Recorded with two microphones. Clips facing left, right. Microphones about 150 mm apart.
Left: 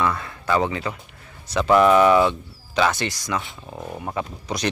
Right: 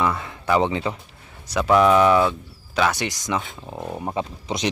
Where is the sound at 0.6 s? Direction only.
20° right (ahead or behind).